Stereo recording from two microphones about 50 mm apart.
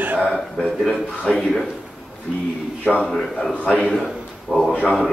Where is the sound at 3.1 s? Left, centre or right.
Centre.